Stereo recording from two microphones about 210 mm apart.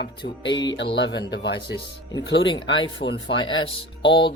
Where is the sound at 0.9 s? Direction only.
55° left (ahead or behind).